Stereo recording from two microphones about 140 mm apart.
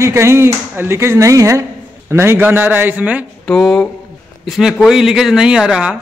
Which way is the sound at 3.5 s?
5° left (ahead or behind).